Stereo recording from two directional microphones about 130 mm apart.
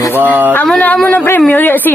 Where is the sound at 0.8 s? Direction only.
10° left (ahead or behind).